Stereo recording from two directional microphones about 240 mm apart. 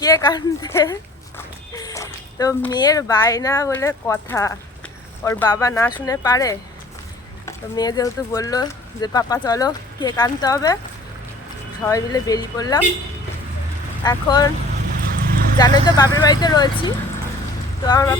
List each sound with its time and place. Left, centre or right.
0.0 s speech: centre
1.7 s a sound: centre
2.7 s speech: centre
11.9 s speech: centre
14.0 s speech: centre
15.0 s clip-clop: right
15.5 s speech: centre